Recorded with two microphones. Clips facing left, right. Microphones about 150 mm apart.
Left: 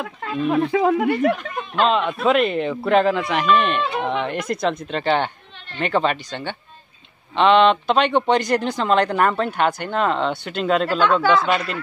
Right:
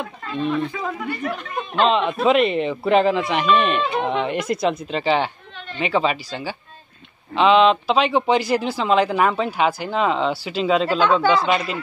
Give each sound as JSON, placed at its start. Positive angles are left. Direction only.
{"t": 0.2, "sound": "a sound", "side_deg": 75}
{"t": 0.7, "sound": "speech", "side_deg": 90}
{"t": 1.8, "sound": "speech", "side_deg": 0}